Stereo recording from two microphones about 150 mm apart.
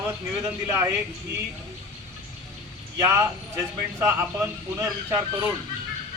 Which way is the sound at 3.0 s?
20° right (ahead or behind).